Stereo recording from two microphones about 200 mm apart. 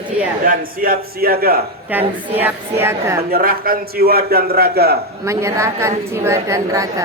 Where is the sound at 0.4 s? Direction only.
45° right (ahead or behind).